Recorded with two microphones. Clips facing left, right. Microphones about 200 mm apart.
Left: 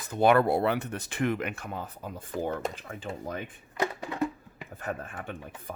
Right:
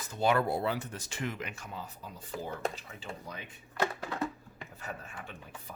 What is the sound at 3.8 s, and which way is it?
Music, 15° left (ahead or behind).